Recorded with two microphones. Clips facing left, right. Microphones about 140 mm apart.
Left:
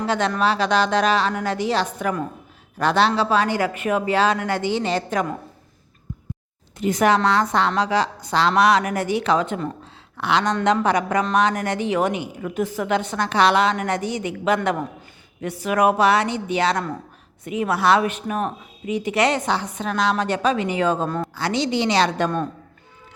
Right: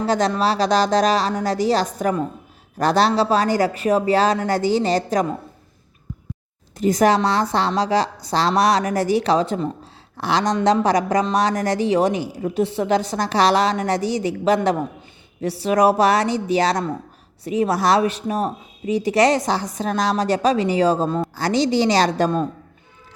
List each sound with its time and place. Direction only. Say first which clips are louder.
0.0 s speech: right 2 dB; 35° right (ahead or behind)
6.7 s speech: right 2 dB; 40° right (ahead or behind)
9.8 s a sound: even; 35° right (ahead or behind)
10.6 s speech: right 2 dB; 35° right (ahead or behind)